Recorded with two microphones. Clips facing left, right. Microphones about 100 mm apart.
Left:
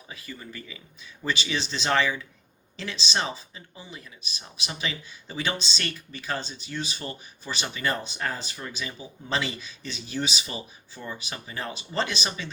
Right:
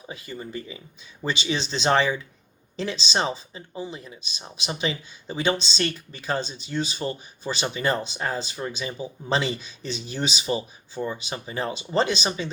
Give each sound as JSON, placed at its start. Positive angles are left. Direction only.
{"t": 0.1, "sound": "speech", "side_deg": -30}